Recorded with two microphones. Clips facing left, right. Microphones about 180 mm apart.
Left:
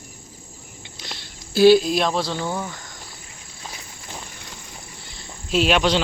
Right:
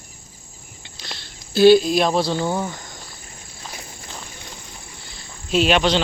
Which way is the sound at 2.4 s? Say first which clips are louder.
Right 4 dB; 25° right (ahead or behind).